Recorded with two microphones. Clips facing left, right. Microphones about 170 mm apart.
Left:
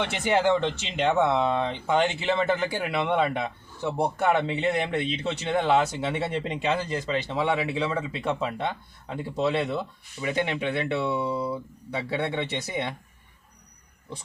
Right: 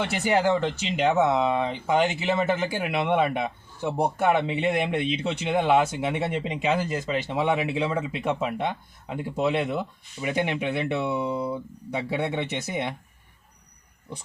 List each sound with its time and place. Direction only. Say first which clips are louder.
0.1 s speech: even; 5° right (ahead or behind)
6.4 s speech: right 2 dB; 5° right (ahead or behind)